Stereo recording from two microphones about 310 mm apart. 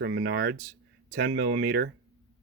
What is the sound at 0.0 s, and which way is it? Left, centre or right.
Speech, right.